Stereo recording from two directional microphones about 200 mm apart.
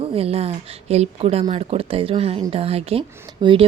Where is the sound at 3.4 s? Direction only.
25° right (ahead or behind).